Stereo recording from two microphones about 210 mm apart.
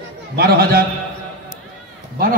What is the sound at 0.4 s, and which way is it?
Speech, 45° right (ahead or behind).